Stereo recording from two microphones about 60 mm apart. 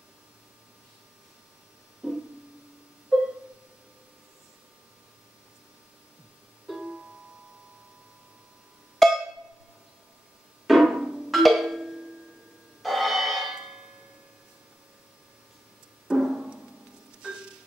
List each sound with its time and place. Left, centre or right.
2.0 s music: centre
6.7 s music: centre
9.0 s percussion: centre
10.7 s percussion: centre
12.8 s music: centre
16.1 s music: centre
17.2 s a sound: centre